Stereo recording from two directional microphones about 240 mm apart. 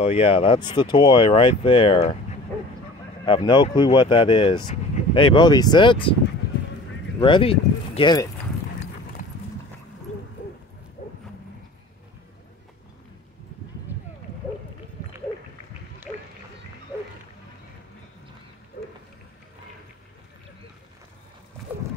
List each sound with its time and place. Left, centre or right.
0.0 s speech: left
3.3 s speech: centre
7.2 s speech: centre
11.0 s dog: left
18.8 s a sound: left